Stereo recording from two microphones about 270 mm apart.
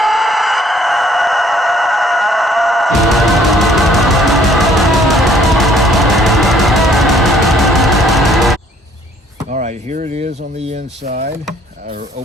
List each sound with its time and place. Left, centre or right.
0.0 s chicken: centre
9.5 s speech: right